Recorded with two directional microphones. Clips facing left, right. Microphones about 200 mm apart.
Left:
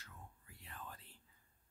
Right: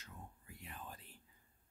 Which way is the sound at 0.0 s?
20° right (ahead or behind).